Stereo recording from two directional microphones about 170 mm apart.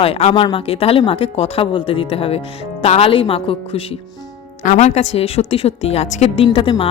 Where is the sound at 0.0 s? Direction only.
35° left (ahead or behind).